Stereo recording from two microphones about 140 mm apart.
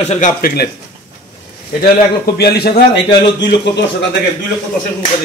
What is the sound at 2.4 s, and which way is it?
Speech, 90° left.